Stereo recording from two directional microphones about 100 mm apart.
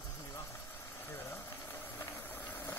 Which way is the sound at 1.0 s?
25° left (ahead or behind).